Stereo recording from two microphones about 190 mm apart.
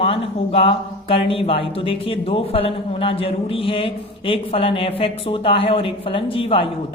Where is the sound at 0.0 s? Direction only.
30° left (ahead or behind).